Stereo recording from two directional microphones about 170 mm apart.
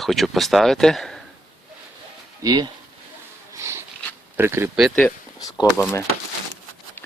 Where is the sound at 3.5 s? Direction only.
15° right (ahead or behind).